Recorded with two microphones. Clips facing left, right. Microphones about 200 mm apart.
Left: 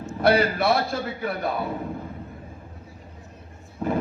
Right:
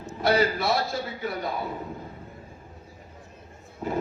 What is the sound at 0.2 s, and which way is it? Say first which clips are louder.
A man's voice: left 3 dB; 60° left (ahead or behind).